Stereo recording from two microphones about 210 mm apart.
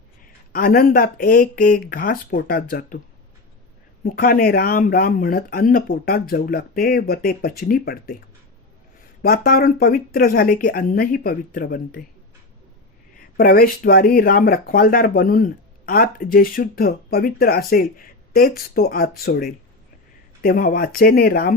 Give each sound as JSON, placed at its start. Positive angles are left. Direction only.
{"t": 0.5, "sound": "speech", "side_deg": 45}
{"t": 4.0, "sound": "speech", "side_deg": 45}
{"t": 9.2, "sound": "speech", "side_deg": 45}
{"t": 13.3, "sound": "speech", "side_deg": 45}